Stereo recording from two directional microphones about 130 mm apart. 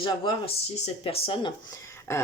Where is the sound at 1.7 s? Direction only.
20° left (ahead or behind).